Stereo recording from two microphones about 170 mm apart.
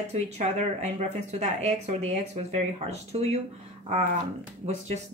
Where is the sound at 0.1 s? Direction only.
40° right (ahead or behind).